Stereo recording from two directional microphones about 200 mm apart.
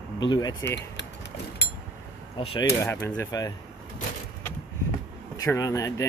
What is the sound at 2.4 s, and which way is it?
Speech, 25° left (ahead or behind).